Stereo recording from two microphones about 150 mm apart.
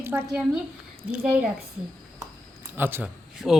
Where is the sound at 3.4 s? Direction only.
Centre (ahead or behind).